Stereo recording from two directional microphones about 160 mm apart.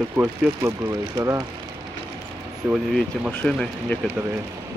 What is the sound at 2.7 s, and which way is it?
Speech, 5° right (ahead or behind).